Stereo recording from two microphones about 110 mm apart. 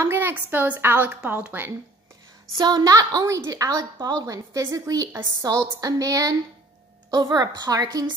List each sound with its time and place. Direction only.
0.0 s a woman's voice: 20° right (ahead or behind)
2.5 s a woman's voice: 35° right (ahead or behind)